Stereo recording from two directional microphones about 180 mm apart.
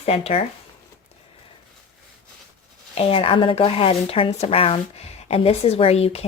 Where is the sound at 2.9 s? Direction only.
35° left (ahead or behind).